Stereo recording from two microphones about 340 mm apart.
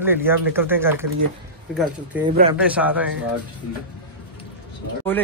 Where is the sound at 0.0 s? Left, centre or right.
Centre.